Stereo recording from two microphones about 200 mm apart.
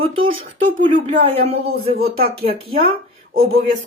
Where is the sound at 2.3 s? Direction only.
30° right (ahead or behind).